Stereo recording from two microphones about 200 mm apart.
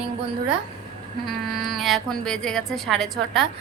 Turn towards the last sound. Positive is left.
turn(degrees=0)  # may be behind; listen again after turning